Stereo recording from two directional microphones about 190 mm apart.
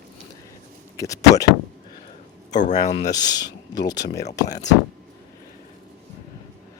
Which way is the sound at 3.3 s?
65° left (ahead or behind).